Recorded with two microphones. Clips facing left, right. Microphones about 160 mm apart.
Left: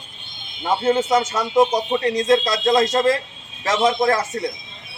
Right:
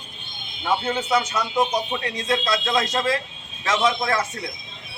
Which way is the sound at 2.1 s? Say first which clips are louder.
Left 6 dB; 40° left (ahead or behind).